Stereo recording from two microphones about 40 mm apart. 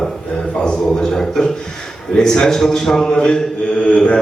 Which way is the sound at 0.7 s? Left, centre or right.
Centre.